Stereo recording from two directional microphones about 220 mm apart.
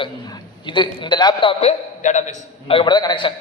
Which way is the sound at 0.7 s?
20° left (ahead or behind).